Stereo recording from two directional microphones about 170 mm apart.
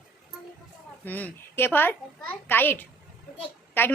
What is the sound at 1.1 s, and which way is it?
A child's voice, 10° left (ahead or behind).